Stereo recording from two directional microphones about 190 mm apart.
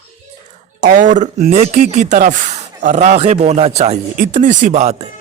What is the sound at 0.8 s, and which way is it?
Speech, 40° right (ahead or behind).